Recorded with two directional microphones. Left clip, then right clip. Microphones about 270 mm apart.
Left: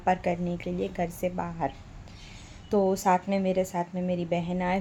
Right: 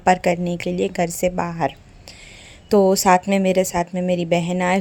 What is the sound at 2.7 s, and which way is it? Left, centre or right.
Speech, right.